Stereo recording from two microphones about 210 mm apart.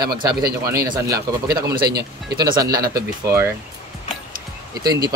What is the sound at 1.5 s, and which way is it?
Speech, 50° right (ahead or behind).